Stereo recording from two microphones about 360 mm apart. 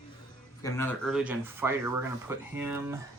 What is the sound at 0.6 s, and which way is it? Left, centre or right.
Speech, centre.